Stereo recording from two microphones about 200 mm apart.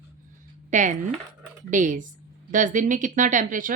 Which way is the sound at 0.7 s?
40° right (ahead or behind).